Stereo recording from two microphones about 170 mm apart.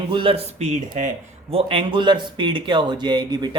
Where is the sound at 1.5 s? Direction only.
35° right (ahead or behind).